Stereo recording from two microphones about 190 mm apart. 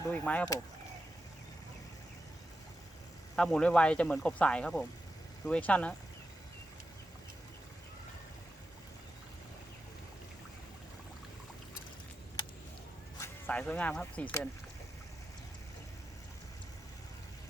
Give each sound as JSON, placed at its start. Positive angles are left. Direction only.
{"t": 0.1, "sound": "speech", "side_deg": 10}
{"t": 3.3, "sound": "speech", "side_deg": 5}
{"t": 13.1, "sound": "speech", "side_deg": 10}